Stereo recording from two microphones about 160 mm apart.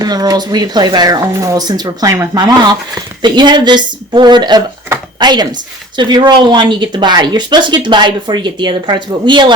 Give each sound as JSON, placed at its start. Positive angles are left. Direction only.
{"t": 0.0, "sound": "speech", "side_deg": -25}